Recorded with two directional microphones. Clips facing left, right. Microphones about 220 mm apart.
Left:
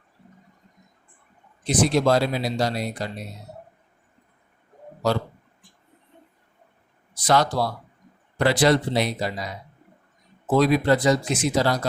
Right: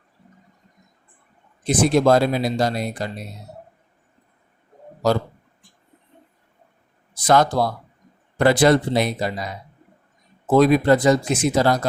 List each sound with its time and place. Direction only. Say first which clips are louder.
1.6 s speech: right 3 dB; 50° right (ahead or behind)
7.3 s speech: right 4 dB; 50° right (ahead or behind)
10.5 s speech: right 4 dB; 50° right (ahead or behind)